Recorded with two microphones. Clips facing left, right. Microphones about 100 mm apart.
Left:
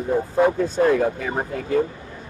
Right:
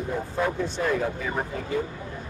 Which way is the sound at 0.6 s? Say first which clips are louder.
Left 7 dB; 45° left (ahead or behind).